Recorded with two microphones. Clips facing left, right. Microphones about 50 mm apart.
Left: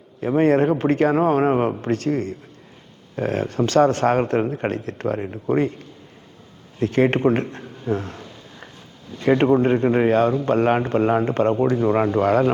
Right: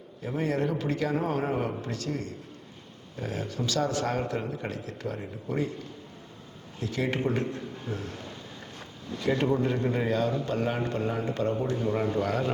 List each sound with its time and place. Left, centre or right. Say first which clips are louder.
0.2 s speech: left 12 dB; left
6.7 s a man's voice: left 11 dB; left
9.2 s speech: left 9 dB; left